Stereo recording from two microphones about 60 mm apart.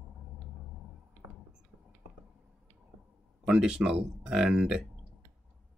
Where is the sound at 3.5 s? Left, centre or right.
Centre.